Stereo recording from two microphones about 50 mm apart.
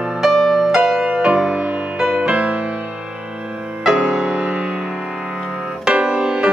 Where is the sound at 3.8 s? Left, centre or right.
Centre.